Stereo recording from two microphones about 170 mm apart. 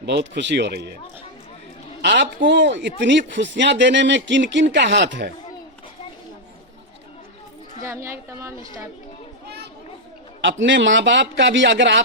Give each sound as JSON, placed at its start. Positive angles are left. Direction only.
{"t": 0.0, "sound": "speech", "side_deg": -90}
{"t": 2.0, "sound": "a man's voice", "side_deg": -75}
{"t": 7.9, "sound": "a woman's voice", "side_deg": -15}
{"t": 10.4, "sound": "speech", "side_deg": -90}